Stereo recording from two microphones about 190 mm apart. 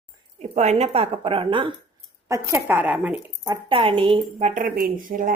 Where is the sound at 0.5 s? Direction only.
35° right (ahead or behind).